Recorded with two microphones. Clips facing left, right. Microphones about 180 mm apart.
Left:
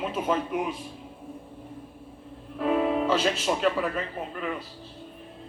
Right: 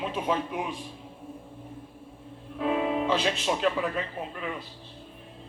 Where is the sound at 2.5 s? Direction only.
Centre (ahead or behind).